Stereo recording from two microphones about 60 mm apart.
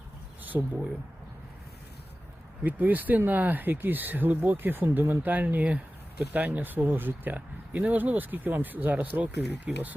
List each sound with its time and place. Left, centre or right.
0.4 s speech: right
2.6 s speech: right